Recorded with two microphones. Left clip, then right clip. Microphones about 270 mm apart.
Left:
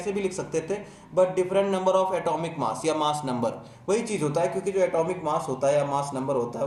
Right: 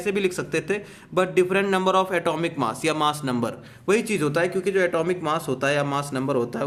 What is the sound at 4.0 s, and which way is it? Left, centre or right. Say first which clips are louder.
A man's voice: right 3 dB; right.